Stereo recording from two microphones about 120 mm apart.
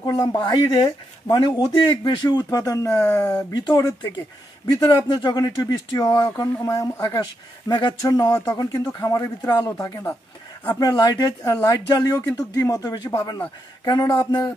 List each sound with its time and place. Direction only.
0.0 s speech: 30° left (ahead or behind)
3.2 s speech: 15° left (ahead or behind)
4.7 s speech: 30° left (ahead or behind)